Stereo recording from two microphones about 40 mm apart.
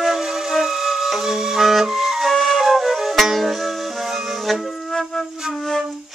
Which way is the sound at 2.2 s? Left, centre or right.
Centre.